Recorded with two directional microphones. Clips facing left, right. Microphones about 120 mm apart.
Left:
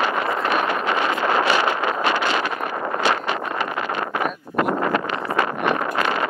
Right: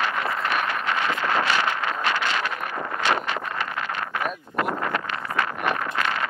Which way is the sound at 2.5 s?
30° left (ahead or behind).